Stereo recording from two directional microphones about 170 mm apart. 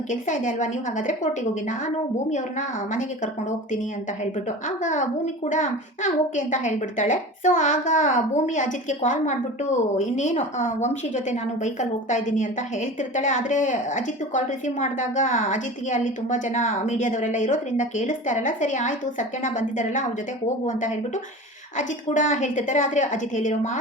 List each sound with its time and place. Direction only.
0.1 s a woman's voice: 50° left (ahead or behind)